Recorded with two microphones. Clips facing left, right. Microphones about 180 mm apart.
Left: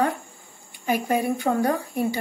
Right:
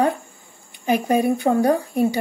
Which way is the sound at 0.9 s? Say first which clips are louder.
Right 5 dB; 25° right (ahead or behind).